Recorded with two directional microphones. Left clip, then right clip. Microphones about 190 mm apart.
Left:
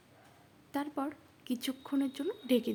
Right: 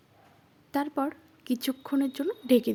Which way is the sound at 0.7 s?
30° right (ahead or behind).